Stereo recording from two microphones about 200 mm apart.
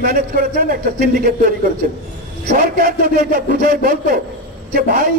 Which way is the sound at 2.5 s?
45° right (ahead or behind).